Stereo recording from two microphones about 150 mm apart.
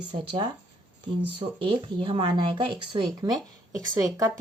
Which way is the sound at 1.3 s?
35° right (ahead or behind).